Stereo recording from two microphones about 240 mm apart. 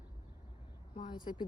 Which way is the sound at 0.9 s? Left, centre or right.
Centre.